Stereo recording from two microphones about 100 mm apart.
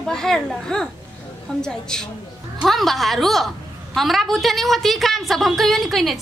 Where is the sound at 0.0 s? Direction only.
5° left (ahead or behind).